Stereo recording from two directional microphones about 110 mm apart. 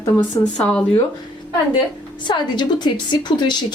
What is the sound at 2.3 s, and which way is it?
Speech, 40° left (ahead or behind).